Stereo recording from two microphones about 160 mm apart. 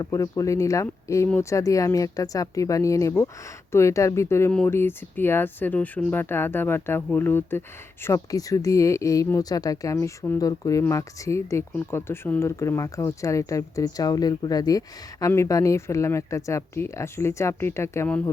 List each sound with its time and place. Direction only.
0.0 s speech: 20° left (ahead or behind)